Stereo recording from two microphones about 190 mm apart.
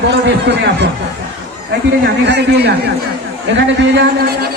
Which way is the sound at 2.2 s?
60° right (ahead or behind).